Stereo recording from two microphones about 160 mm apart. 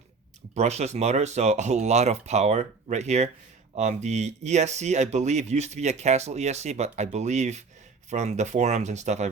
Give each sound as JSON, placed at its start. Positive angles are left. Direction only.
{"t": 0.5, "sound": "speech", "side_deg": -45}